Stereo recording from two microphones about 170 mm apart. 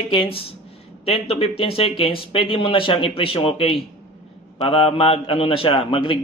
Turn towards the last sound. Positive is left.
turn(degrees=30)  # may be behind; listen again after turning